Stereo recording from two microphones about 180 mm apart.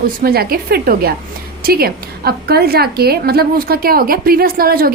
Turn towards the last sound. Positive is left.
turn(degrees=-55)  # may be behind; listen again after turning